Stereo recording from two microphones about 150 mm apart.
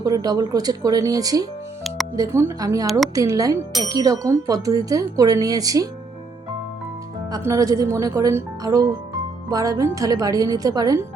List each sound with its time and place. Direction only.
0.0 s speech: 25° right (ahead or behind)
7.3 s speech: 20° right (ahead or behind)